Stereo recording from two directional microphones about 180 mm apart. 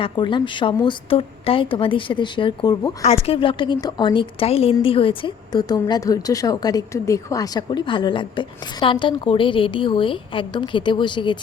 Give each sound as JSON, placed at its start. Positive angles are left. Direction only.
{"t": 0.0, "sound": "a woman's voice", "side_deg": 25}